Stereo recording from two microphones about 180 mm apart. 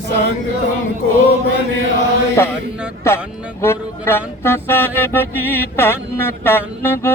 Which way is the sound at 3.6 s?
15° left (ahead or behind).